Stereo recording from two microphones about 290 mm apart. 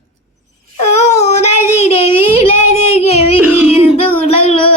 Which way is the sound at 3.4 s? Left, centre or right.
Centre.